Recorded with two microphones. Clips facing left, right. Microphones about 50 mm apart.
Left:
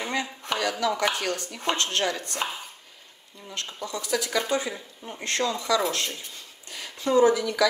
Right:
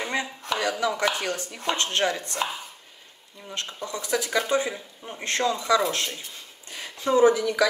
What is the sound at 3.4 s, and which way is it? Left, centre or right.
Speech, right.